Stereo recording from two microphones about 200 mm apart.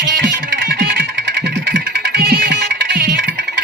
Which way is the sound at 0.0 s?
60° right (ahead or behind).